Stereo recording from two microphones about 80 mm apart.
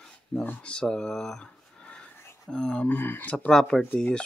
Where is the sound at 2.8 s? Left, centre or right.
Left.